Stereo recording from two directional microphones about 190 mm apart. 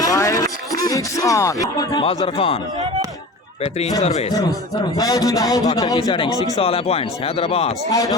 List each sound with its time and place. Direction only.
0.0 s speech: 15° left (ahead or behind)
4.3 s a man's voice: 20° left (ahead or behind)
7.9 s speech: 15° left (ahead or behind)